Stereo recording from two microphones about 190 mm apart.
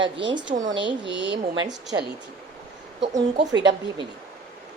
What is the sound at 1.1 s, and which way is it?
Speech, 70° right (ahead or behind).